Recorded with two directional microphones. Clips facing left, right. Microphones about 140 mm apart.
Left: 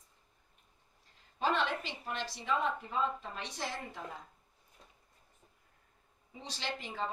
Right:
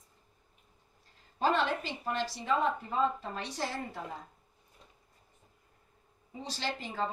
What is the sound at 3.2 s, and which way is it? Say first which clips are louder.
Speech: right 5 dB; 40° right (ahead or behind).